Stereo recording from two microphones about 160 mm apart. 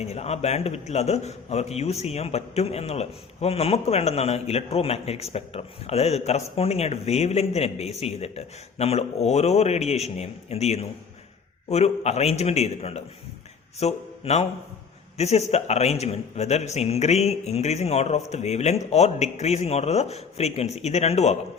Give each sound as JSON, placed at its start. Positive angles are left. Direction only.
{"t": 0.0, "sound": "a man's voice", "side_deg": 40}